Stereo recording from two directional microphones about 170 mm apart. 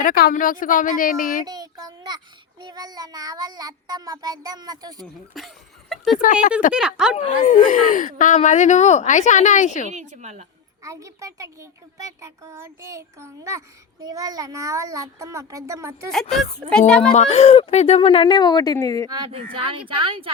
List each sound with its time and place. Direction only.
0.0 s speech: 60° left (ahead or behind)
1.5 s a child's voice: 25° right (ahead or behind)
5.4 s speech: centre (ahead or behind)
7.2 s speech: 45° left (ahead or behind)
9.9 s a woman's voice: 45° right (ahead or behind)
10.8 s a child's voice: 20° right (ahead or behind)
16.6 s speech: 5° left (ahead or behind)
17.2 s speech: 40° left (ahead or behind); by 19.0 s 20° left (ahead or behind)
19.1 s speech: 30° right (ahead or behind)